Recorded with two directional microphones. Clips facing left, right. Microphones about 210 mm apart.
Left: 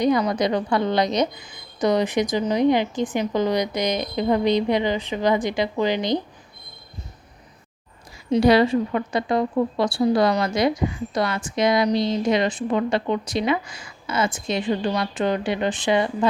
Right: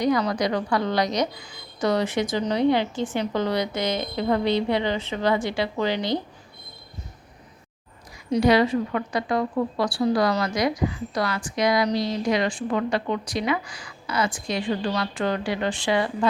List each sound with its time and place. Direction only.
0.3 s a woman's voice: 20° left (ahead or behind)
8.3 s a woman's voice: 30° left (ahead or behind)